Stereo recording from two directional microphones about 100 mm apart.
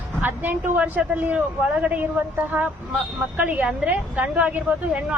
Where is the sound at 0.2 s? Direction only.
20° right (ahead or behind).